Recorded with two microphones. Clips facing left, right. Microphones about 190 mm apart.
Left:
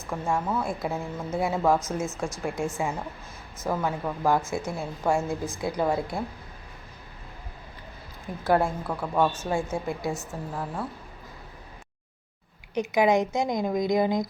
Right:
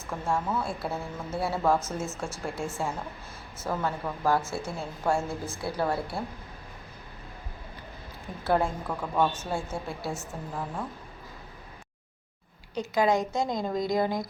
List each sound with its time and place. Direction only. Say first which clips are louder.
0.1 s a woman's voice: left 2 dB; 10° left (ahead or behind)
8.4 s a woman's voice: left 3 dB; 10° left (ahead or behind)
12.7 s a woman's voice: left 3 dB; 20° left (ahead or behind)